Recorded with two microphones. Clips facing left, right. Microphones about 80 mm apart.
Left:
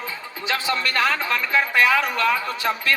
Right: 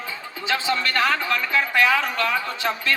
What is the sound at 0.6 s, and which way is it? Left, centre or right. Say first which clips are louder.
Speech: even; centre.